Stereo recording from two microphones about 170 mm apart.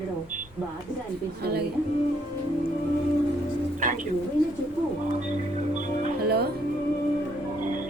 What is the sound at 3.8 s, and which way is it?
Music, 50° right (ahead or behind).